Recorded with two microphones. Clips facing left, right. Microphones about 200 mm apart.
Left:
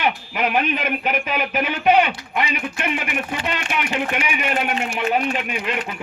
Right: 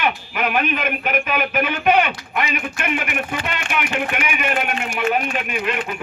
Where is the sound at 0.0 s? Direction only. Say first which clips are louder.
Even; 30° left (ahead or behind).